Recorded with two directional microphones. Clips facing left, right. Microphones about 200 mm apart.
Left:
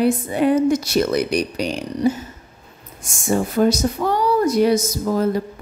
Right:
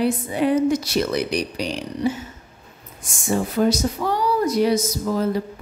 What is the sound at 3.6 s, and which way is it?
Speech, 45° left (ahead or behind).